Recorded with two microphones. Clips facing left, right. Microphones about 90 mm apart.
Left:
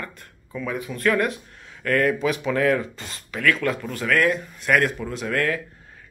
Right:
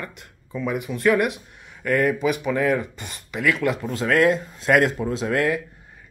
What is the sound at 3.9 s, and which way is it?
Speech, 25° right (ahead or behind).